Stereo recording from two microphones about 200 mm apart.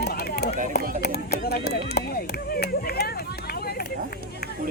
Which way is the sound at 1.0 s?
50° left (ahead or behind).